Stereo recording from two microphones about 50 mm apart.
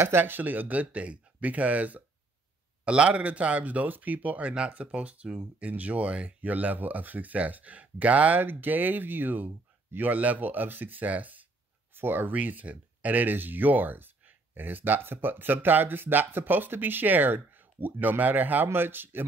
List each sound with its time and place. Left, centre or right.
0.0 s speech: right
11.9 s speech: right